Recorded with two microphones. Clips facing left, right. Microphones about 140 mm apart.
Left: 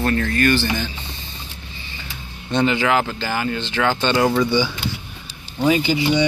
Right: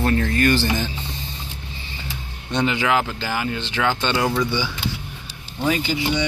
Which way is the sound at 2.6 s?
10° right (ahead or behind).